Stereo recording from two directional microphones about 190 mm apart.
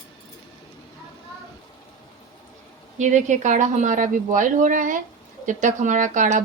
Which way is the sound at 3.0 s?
40° right (ahead or behind).